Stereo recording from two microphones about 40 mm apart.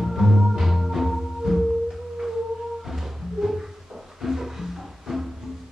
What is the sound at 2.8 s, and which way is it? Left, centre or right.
Music, centre.